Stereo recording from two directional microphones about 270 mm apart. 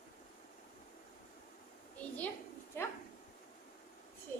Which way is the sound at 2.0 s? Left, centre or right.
Centre.